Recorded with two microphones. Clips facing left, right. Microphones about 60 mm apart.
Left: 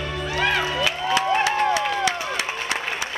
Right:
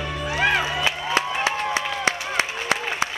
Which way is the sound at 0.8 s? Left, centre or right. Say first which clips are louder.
Left 2 dB; right.